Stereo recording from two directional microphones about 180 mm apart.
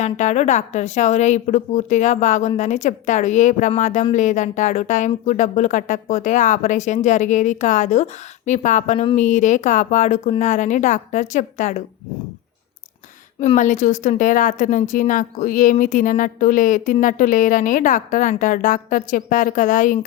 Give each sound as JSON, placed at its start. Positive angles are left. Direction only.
{"t": 0.0, "sound": "a woman's voice", "side_deg": 40}
{"t": 13.4, "sound": "speech", "side_deg": 45}